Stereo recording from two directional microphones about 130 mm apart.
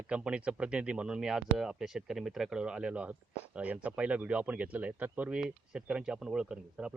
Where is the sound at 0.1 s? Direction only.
10° right (ahead or behind).